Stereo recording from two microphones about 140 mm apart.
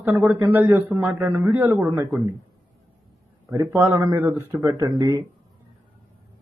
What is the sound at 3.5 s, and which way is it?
A man's voice, 20° right (ahead or behind).